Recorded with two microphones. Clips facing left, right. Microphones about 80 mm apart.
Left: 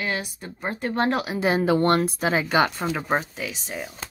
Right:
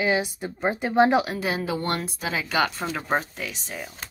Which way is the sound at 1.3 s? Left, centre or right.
Left.